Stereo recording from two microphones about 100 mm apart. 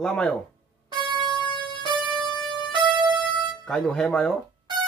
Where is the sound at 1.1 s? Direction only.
50° right (ahead or behind).